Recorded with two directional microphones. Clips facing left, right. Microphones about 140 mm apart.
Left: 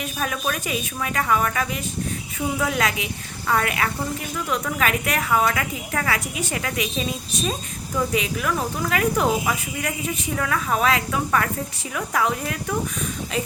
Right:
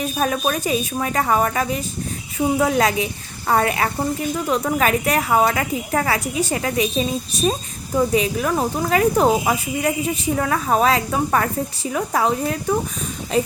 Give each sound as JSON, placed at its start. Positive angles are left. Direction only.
{"t": 0.0, "sound": "speech", "side_deg": -35}